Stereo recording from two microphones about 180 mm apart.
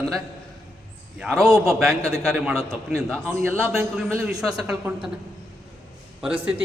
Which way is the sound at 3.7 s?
10° right (ahead or behind).